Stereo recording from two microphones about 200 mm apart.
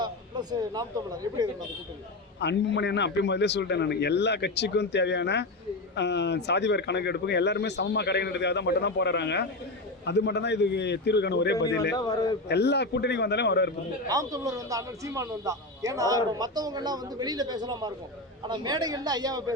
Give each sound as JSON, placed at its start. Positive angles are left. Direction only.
{"t": 0.0, "sound": "speech", "side_deg": -20}
{"t": 2.4, "sound": "speech", "side_deg": 60}
{"t": 11.9, "sound": "a man's voice", "side_deg": 20}
{"t": 12.5, "sound": "speech", "side_deg": 55}
{"t": 14.1, "sound": "a man's voice", "side_deg": -20}